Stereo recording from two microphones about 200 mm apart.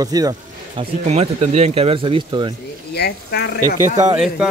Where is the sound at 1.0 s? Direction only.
35° right (ahead or behind).